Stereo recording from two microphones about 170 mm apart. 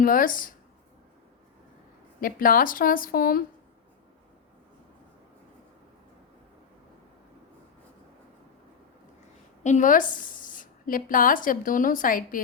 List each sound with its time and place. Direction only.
0.0 s speech: 55° left (ahead or behind)
2.2 s a woman's voice: 55° left (ahead or behind)
9.6 s speech: 45° left (ahead or behind)